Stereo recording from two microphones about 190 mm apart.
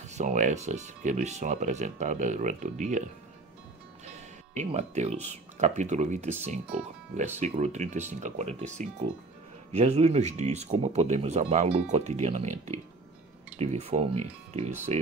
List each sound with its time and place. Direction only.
0.0 s speech: 40° right (ahead or behind)
4.0 s music: 35° right (ahead or behind)
5.8 s speech: 40° right (ahead or behind)